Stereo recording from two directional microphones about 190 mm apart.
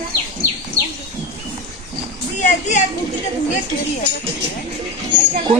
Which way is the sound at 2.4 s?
40° left (ahead or behind).